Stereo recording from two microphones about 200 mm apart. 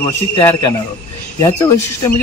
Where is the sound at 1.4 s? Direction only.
15° left (ahead or behind).